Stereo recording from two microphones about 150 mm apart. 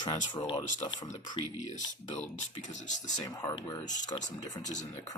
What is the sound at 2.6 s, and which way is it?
Speech, 55° left (ahead or behind).